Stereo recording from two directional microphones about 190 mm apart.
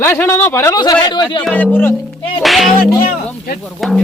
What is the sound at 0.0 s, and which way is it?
Speech, 15° left (ahead or behind).